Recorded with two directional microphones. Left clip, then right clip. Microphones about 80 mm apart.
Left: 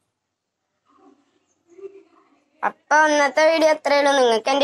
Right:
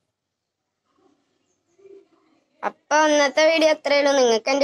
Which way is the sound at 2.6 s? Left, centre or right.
Centre.